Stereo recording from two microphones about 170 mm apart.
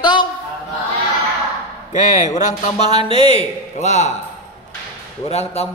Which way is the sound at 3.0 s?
30° right (ahead or behind).